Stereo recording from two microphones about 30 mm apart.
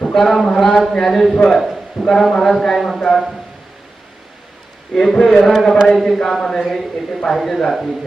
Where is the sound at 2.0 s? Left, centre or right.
Centre.